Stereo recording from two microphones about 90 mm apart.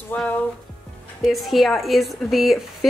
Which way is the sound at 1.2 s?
Centre (ahead or behind).